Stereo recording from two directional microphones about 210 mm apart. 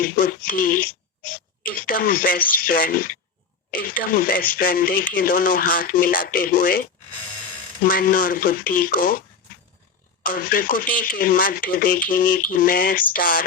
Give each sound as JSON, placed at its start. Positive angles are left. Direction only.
{"t": 0.0, "sound": "speech", "side_deg": 45}
{"t": 1.9, "sound": "speech", "side_deg": 45}
{"t": 10.2, "sound": "speech", "side_deg": 45}